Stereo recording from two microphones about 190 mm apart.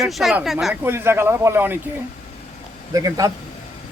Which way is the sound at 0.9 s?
10° right (ahead or behind).